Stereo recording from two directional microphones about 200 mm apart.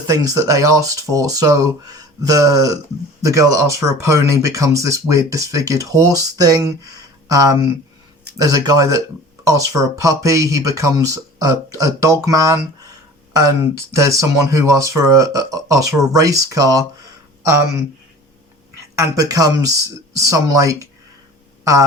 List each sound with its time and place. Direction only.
0.1 s speech: 15° right (ahead or behind)
13.9 s speech: 15° right (ahead or behind)
18.9 s speech: 20° right (ahead or behind)